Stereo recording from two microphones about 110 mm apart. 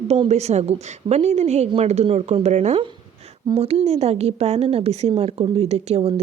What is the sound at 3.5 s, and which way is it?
A woman's voice, 65° right (ahead or behind).